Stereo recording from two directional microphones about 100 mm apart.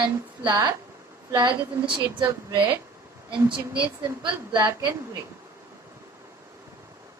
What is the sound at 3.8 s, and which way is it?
Speech, 55° right (ahead or behind).